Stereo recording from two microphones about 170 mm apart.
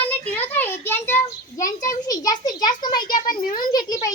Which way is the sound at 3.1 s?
55° left (ahead or behind).